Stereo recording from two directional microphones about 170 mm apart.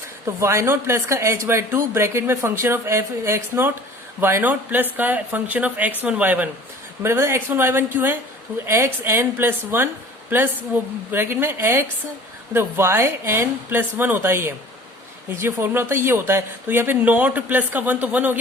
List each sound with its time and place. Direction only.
0.3 s speech: 15° right (ahead or behind)